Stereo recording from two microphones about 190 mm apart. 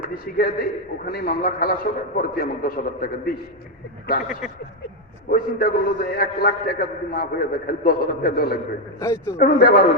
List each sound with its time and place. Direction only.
0.1 s a man's voice: 50° left (ahead or behind)
5.3 s a man's voice: 50° left (ahead or behind)
9.0 s a man's voice: 15° left (ahead or behind)
9.4 s a man's voice: 50° left (ahead or behind)